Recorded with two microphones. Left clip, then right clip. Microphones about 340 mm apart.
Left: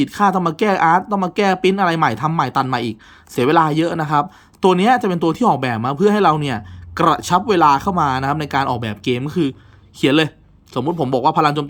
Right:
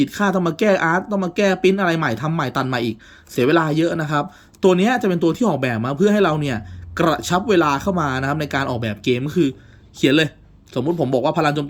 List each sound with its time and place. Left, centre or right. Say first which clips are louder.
0.0 s speech: left 3 dB; centre